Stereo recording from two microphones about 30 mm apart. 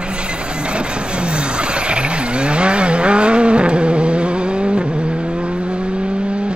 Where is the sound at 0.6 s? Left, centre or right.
Right.